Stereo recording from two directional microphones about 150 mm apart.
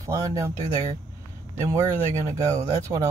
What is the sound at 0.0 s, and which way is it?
Speech, 20° right (ahead or behind).